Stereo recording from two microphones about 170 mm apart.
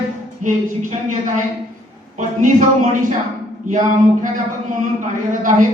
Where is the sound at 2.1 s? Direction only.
45° right (ahead or behind).